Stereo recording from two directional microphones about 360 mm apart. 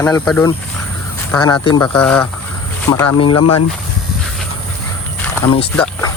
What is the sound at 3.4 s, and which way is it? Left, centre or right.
Speech, left.